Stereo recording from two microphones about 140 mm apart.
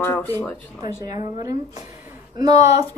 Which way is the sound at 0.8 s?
25° right (ahead or behind).